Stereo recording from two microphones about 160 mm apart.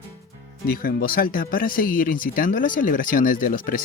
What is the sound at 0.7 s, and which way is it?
Speech, 65° left (ahead or behind).